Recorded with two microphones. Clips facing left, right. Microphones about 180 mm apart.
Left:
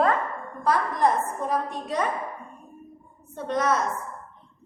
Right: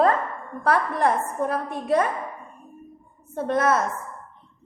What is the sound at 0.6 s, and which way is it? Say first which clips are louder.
A woman's voice: right 1 dB; 60° right (ahead or behind).